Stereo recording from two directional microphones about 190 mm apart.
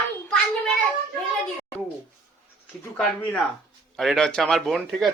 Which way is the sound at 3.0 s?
10° left (ahead or behind).